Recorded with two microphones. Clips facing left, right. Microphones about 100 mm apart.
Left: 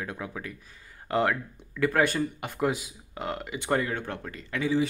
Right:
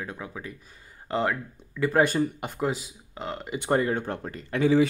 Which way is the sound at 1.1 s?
5° right (ahead or behind).